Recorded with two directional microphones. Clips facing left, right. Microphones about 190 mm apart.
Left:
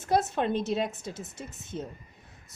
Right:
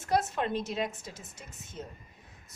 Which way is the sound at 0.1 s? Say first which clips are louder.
Left 3 dB; 30° left (ahead or behind).